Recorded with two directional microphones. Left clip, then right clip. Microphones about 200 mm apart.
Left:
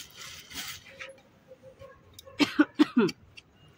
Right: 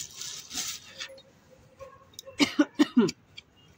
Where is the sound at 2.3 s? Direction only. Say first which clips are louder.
Even; 5° right (ahead or behind).